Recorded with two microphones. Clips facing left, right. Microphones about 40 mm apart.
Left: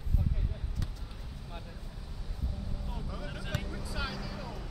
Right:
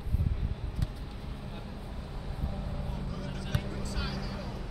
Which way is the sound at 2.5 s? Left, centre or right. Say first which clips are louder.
Right 4 dB; right.